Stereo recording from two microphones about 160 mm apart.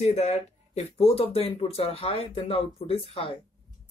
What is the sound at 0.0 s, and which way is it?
Speech, 40° left (ahead or behind).